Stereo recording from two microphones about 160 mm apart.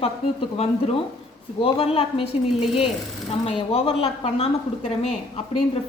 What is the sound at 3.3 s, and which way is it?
A woman's voice, 35° left (ahead or behind).